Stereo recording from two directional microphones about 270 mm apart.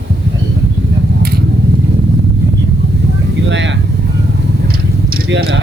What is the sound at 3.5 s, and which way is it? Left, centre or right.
Vehicle, right.